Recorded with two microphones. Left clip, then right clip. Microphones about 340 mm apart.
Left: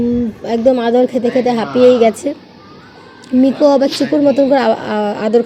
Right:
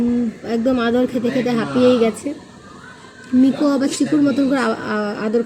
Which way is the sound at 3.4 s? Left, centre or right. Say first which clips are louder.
Left 8 dB; centre.